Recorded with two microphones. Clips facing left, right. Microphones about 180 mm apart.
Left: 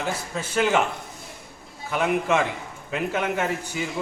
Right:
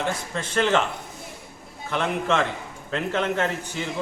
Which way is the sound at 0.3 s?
5° left (ahead or behind).